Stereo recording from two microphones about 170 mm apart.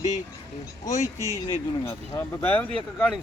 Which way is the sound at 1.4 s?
15° left (ahead or behind).